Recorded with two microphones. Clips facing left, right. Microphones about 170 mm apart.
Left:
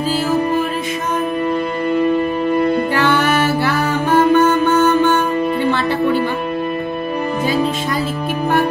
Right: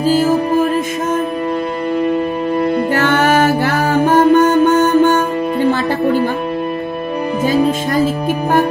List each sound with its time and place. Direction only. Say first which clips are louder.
0.1 s music: right 3 dB; 45° right (ahead or behind)
2.9 s music: right 2 dB; 45° right (ahead or behind)
7.4 s music: right 6 dB; 45° right (ahead or behind)